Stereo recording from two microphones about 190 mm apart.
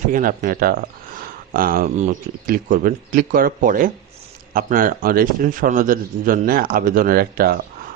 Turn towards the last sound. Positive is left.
turn(degrees=-50)  # may be behind; listen again after turning